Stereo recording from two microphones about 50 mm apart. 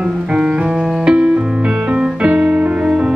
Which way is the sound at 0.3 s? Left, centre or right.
Right.